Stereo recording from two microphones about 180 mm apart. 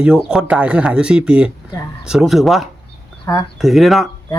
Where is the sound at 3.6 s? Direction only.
Centre (ahead or behind).